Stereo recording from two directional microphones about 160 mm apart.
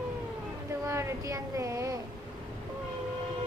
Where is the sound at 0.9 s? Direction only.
20° right (ahead or behind).